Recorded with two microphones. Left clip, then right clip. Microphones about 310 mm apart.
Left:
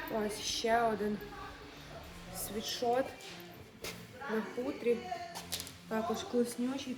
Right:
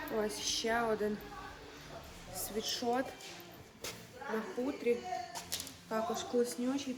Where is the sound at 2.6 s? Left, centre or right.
Centre.